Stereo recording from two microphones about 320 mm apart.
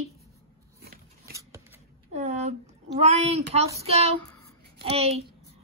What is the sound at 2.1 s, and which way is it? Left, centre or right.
Speech, right.